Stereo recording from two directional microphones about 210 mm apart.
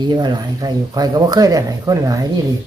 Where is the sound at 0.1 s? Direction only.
20° right (ahead or behind).